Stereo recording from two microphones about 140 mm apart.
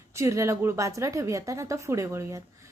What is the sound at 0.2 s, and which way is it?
A woman's voice, 20° right (ahead or behind).